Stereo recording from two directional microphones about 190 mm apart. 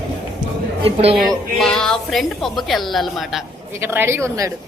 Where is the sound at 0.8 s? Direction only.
30° right (ahead or behind).